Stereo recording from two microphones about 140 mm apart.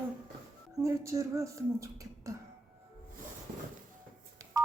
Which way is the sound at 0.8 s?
20° right (ahead or behind).